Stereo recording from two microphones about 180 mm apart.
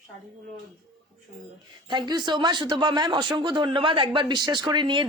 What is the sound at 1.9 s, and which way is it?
Speech, 25° right (ahead or behind).